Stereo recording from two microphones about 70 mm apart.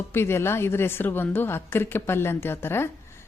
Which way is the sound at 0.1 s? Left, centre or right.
Left.